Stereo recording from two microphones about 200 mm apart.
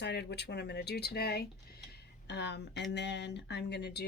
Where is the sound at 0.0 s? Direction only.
55° left (ahead or behind).